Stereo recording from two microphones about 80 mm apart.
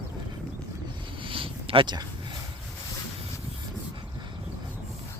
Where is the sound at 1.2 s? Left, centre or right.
Right.